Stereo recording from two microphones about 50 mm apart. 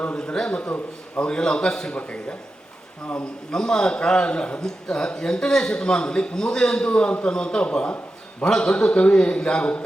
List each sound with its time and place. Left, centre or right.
0.0 s a man's voice: left
0.7 s a man's voice: left
1.3 s a man's voice: centre